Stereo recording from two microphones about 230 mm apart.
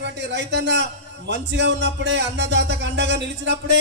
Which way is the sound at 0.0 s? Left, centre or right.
Right.